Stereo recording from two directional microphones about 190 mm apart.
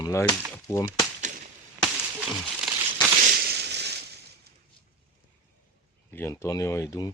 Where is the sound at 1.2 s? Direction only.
45° right (ahead or behind).